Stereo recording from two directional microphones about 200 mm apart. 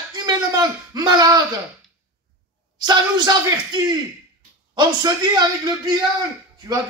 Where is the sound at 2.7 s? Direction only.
20° right (ahead or behind).